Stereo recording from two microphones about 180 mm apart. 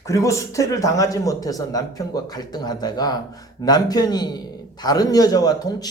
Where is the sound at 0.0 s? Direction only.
15° left (ahead or behind).